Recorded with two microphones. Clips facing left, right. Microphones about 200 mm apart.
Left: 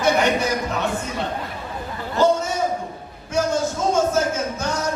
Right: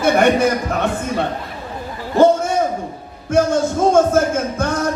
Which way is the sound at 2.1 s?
55° right (ahead or behind).